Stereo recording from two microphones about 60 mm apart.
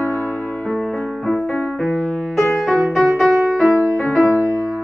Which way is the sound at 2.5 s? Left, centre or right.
Centre.